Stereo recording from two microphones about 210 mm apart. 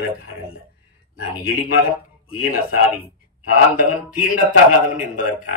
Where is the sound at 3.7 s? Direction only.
40° left (ahead or behind).